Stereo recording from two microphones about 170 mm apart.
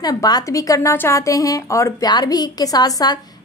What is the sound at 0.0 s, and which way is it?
A woman's voice, 20° left (ahead or behind).